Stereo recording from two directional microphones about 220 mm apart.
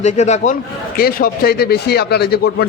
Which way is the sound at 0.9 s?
45° left (ahead or behind).